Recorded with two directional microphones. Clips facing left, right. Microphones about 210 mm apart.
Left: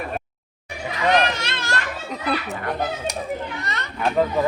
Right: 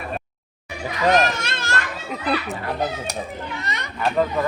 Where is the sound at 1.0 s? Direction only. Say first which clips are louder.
Right 1 dB; 45° right (ahead or behind).